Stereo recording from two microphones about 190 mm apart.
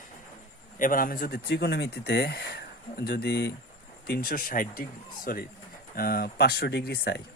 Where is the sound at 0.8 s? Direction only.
45° left (ahead or behind).